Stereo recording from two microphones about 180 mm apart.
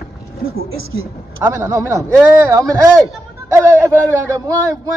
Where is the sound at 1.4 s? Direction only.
15° right (ahead or behind).